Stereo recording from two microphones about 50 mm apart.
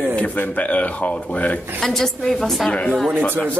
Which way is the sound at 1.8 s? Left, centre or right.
Centre.